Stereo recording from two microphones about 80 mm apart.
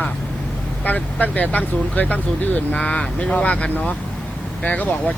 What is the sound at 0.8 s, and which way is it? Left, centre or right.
Speech, centre.